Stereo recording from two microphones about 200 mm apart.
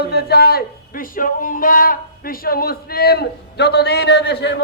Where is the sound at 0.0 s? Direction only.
55° left (ahead or behind).